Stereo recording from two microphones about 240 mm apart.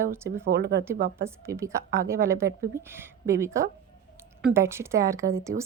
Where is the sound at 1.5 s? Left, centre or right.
Centre.